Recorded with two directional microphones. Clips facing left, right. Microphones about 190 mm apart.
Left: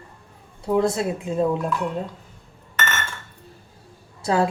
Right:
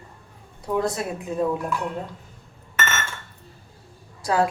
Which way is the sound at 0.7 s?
25° left (ahead or behind).